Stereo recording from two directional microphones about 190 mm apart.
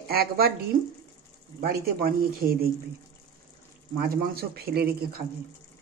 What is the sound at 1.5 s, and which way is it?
Speech, 50° right (ahead or behind).